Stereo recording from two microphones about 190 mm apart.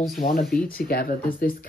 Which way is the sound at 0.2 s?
50° left (ahead or behind).